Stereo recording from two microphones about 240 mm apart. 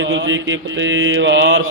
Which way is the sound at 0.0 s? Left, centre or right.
Right.